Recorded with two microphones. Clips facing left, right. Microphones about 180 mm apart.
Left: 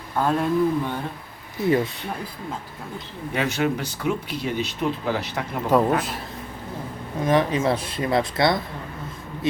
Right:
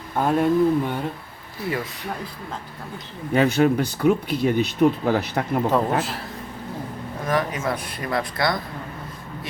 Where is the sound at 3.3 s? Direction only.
40° right (ahead or behind).